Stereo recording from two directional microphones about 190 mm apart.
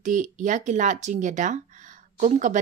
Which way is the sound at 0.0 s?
40° right (ahead or behind).